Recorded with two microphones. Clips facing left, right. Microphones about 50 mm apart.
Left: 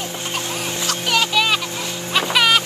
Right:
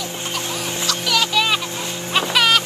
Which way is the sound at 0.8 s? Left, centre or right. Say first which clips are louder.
Left 1 dB; left.